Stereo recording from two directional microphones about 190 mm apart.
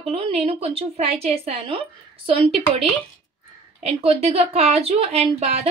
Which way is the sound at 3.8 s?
30° right (ahead or behind).